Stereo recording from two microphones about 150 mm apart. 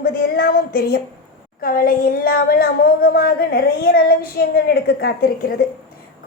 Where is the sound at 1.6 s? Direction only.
70° left (ahead or behind).